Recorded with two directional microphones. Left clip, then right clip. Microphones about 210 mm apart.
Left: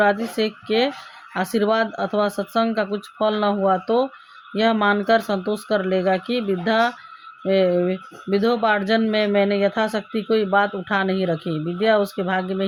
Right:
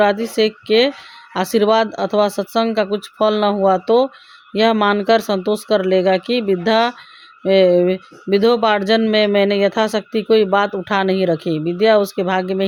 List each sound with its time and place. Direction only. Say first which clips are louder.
0.0 s speech: right 4 dB; 40° right (ahead or behind)